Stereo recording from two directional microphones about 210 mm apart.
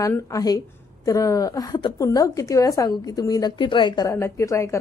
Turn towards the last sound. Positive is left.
turn(degrees=15)  # may be behind; listen again after turning